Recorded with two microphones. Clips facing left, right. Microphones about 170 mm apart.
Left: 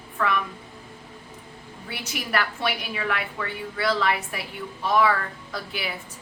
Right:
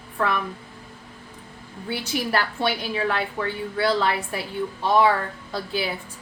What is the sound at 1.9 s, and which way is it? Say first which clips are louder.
A woman's voice: right 5 dB; 30° right (ahead or behind).